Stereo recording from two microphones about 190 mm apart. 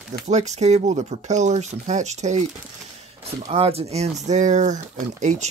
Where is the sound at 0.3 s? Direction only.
35° right (ahead or behind).